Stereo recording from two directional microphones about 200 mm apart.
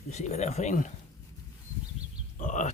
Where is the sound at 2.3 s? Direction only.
40° left (ahead or behind).